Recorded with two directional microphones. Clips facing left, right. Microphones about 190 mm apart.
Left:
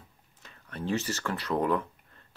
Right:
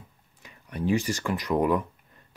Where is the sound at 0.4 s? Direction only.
15° right (ahead or behind).